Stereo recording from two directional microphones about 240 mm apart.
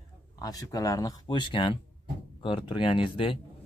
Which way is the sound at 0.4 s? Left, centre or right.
Centre.